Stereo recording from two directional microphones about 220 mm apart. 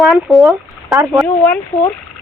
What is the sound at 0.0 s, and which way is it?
Speech, centre (ahead or behind).